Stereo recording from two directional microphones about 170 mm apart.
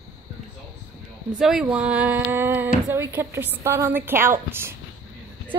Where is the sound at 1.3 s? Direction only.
5° right (ahead or behind).